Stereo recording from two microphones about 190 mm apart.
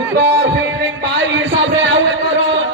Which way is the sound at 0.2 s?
70° right (ahead or behind).